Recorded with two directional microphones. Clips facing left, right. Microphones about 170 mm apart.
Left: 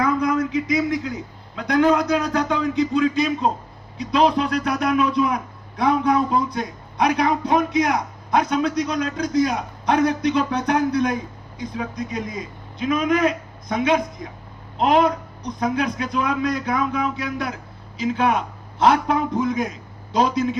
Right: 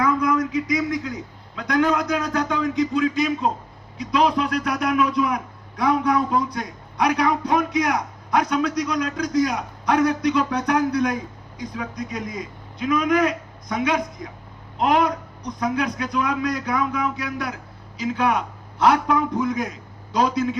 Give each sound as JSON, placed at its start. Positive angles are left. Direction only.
{"t": 0.0, "sound": "a man's voice", "side_deg": 30}